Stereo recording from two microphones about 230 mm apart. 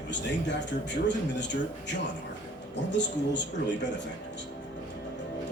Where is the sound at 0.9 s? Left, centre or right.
Left.